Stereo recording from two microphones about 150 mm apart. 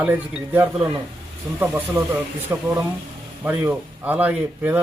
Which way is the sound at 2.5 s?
15° right (ahead or behind).